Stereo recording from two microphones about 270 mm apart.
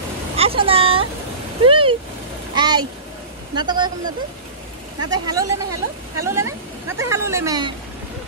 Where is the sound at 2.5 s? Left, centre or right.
Centre.